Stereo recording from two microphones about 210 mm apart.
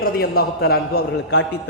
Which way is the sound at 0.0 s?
45° left (ahead or behind).